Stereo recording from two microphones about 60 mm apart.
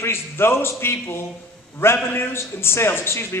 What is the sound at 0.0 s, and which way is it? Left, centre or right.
A man's voice, left.